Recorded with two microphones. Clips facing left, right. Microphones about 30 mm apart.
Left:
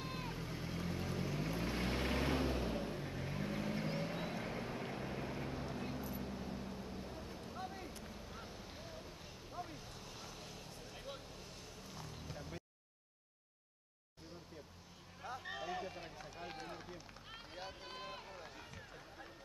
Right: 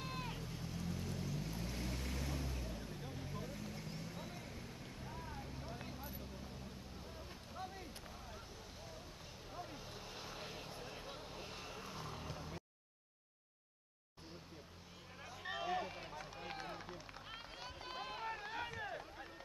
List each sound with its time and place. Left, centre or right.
0.0 s vehicle: centre
0.4 s vehicle: left
5.7 s vehicle: centre
7.5 s a sound: centre
8.0 s boat: centre
9.5 s vehicle: centre
9.8 s vehicle: centre
11.0 s vehicle: centre
11.2 s vehicle: right
12.3 s vehicle: centre
15.4 s run: centre
18.2 s run: right